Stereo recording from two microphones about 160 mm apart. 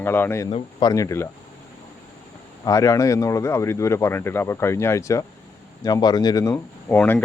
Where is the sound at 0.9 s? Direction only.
20° left (ahead or behind).